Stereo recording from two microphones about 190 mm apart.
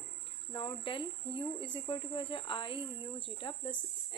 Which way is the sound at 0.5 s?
25° left (ahead or behind).